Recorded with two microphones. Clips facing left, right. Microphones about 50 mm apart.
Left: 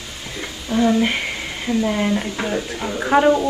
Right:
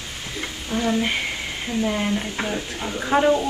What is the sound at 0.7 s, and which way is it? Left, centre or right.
Speech, left.